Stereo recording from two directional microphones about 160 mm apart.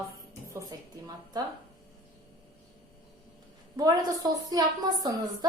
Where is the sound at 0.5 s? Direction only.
25° right (ahead or behind).